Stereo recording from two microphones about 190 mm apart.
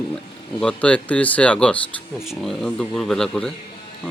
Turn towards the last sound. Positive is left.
turn(degrees=5)  # may be behind; listen again after turning